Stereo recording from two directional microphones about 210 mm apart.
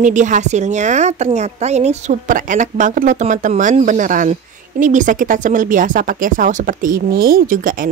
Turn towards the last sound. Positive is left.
turn(degrees=-40)  # may be behind; listen again after turning